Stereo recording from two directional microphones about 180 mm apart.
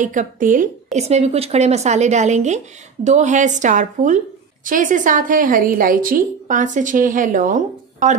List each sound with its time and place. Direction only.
0.0 s a woman's voice: 45° right (ahead or behind)
0.9 s a woman's voice: 35° right (ahead or behind)